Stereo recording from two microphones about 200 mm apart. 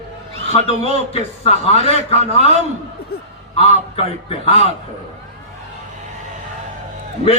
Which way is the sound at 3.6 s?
30° left (ahead or behind).